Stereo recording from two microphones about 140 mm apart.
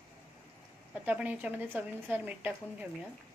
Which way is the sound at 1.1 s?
10° right (ahead or behind).